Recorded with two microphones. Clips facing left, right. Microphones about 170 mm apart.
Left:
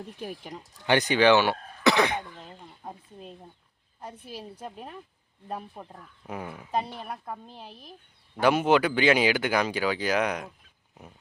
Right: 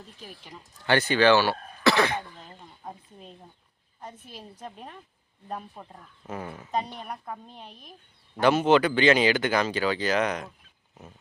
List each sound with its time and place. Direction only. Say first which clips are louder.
0.2 s speech: left 10 dB; 60° left (ahead or behind)
0.9 s speech: even; 15° left (ahead or behind)
2.4 s a sound: left 1 dB; centre (ahead or behind)
4.0 s speech: left 3 dB; 10° left (ahead or behind)